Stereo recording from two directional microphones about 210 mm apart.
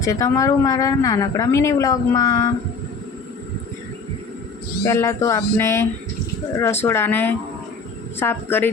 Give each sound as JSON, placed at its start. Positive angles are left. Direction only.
{"t": 0.0, "sound": "speech", "side_deg": 15}
{"t": 4.9, "sound": "speech", "side_deg": 15}